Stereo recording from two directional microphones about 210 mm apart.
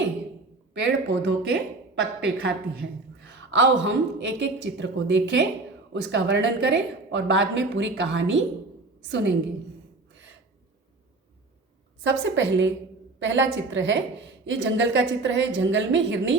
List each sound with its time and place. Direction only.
0.7 s a woman's voice: 60° right (ahead or behind)
3.5 s a woman's voice: 60° right (ahead or behind)
12.0 s a woman's voice: 60° right (ahead or behind)